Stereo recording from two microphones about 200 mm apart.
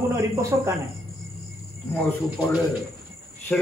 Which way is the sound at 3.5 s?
5° left (ahead or behind).